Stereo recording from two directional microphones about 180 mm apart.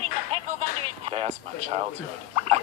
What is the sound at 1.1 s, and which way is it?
Speech, 35° right (ahead or behind).